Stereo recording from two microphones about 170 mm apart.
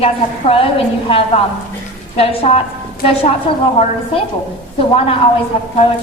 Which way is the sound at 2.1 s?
35° left (ahead or behind).